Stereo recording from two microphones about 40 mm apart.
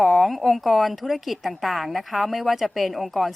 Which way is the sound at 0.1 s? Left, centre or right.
Centre.